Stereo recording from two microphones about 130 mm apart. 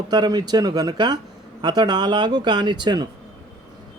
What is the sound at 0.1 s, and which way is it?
Speech, 30° right (ahead or behind).